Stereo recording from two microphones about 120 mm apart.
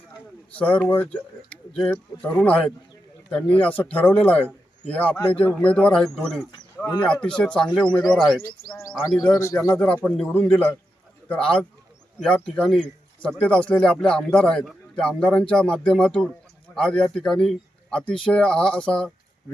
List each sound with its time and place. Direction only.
0.5 s a man's voice: 10° left (ahead or behind)
9.4 s speech: 25° left (ahead or behind)
9.7 s a man's voice: 10° left (ahead or behind)